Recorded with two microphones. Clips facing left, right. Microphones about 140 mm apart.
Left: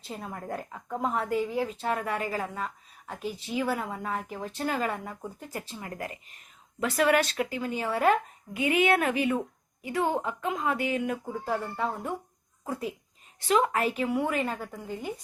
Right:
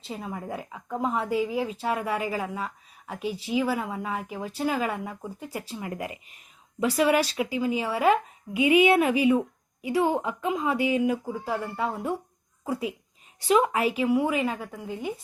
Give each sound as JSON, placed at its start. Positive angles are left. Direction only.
{"t": 0.0, "sound": "a woman's voice", "side_deg": 0}
{"t": 6.1, "sound": "speech", "side_deg": 40}
{"t": 6.7, "sound": "a woman's voice", "side_deg": -10}